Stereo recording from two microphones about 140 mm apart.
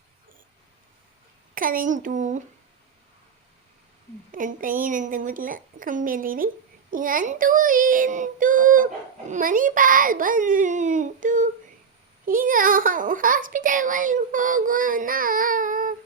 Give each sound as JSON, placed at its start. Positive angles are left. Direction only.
{"t": 1.5, "sound": "a child's voice", "side_deg": -80}
{"t": 4.3, "sound": "a child's voice", "side_deg": -70}
{"t": 6.9, "sound": "a child's voice", "side_deg": -75}
{"t": 12.2, "sound": "a child's voice", "side_deg": -80}